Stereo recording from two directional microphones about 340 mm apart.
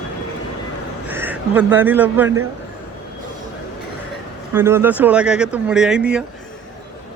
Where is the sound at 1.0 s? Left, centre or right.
Centre.